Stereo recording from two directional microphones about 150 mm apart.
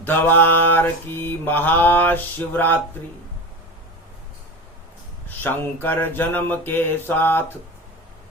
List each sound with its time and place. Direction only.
0.0 s mantra: 15° left (ahead or behind)
5.4 s mantra: 15° left (ahead or behind)